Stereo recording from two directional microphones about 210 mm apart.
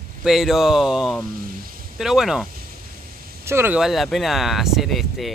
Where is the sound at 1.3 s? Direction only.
45° right (ahead or behind).